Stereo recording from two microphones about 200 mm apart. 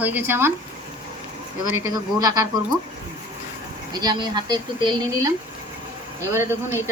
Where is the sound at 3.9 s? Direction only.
20° right (ahead or behind).